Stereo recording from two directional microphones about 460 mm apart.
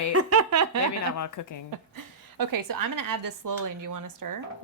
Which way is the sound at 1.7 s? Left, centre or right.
Right.